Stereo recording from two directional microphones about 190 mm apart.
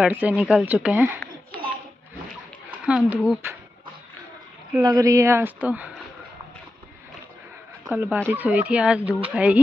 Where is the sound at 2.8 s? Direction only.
5° right (ahead or behind).